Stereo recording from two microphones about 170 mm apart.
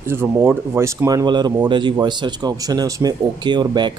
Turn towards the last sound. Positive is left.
turn(degrees=-25)  # may be behind; listen again after turning